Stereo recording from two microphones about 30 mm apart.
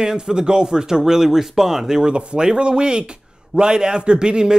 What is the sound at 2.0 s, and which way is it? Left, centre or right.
A man's voice, right.